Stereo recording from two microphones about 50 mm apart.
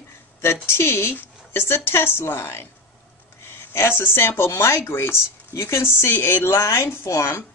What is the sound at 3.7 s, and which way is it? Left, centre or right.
Speech, left.